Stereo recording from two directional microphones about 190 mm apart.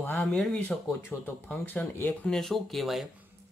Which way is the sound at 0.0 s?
10° left (ahead or behind).